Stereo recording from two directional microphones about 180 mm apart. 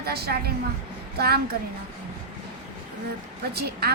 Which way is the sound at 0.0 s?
60° right (ahead or behind).